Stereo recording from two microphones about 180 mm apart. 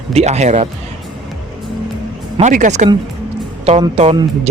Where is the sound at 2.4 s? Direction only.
40° right (ahead or behind).